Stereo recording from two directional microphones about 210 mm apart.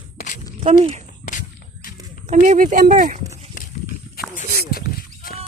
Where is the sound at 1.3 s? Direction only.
40° left (ahead or behind).